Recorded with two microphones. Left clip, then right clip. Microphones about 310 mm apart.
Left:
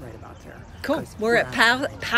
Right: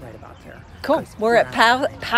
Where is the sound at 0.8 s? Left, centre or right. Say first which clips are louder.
Right 5 dB; centre.